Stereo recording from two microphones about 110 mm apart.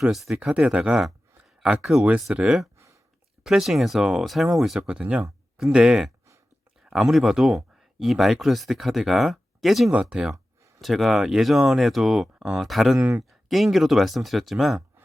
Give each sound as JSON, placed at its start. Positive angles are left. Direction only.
{"t": 0.0, "sound": "speech", "side_deg": 0}
{"t": 2.7, "sound": "a sound", "side_deg": -25}
{"t": 3.4, "sound": "speech", "side_deg": -5}